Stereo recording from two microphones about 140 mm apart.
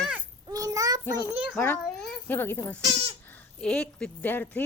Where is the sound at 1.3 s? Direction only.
10° right (ahead or behind).